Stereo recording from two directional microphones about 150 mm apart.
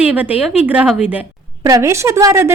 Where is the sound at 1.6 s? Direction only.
20° right (ahead or behind).